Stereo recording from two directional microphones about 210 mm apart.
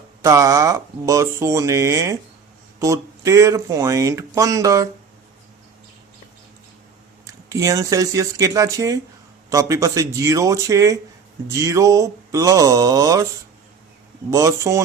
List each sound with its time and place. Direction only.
0.2 s speech: 15° right (ahead or behind)
7.5 s speech: 15° right (ahead or behind)
14.3 s speech: 15° right (ahead or behind)